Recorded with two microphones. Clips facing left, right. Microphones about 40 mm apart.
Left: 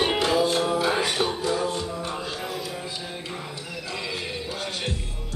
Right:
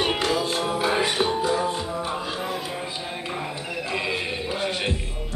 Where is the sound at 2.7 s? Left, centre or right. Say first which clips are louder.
Right 3 dB; right.